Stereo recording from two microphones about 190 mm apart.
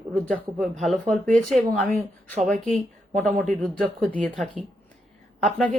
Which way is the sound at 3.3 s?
45° right (ahead or behind).